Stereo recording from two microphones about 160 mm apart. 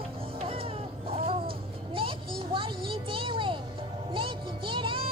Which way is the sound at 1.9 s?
35° right (ahead or behind).